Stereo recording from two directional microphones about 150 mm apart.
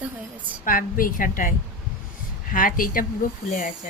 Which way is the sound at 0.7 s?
70° left (ahead or behind).